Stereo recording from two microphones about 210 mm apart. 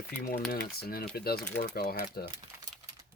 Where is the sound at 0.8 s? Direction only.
45° left (ahead or behind).